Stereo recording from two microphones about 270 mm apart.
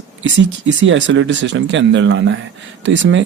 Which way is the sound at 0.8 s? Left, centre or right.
Right.